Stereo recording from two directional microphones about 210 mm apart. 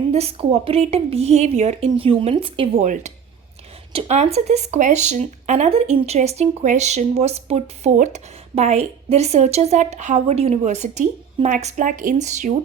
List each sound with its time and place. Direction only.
0.1 s a woman's voice: 30° right (ahead or behind)
2.8 s speech: 35° right (ahead or behind)